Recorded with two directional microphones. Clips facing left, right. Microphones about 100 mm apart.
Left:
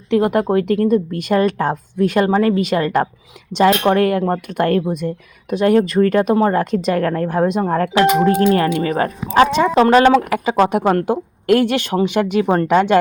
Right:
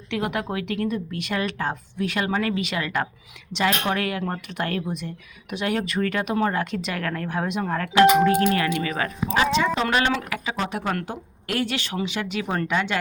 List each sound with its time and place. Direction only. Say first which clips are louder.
0.1 s a woman's voice: left 12 dB; 40° left (ahead or behind)